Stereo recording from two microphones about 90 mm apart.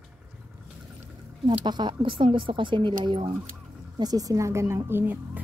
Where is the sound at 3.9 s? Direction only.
45° right (ahead or behind); by 5.2 s 25° right (ahead or behind).